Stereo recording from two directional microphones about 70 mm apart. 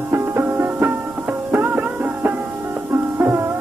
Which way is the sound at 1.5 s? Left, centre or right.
Right.